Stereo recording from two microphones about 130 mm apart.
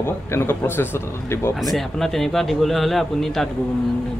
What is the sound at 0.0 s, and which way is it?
Speech, 20° left (ahead or behind).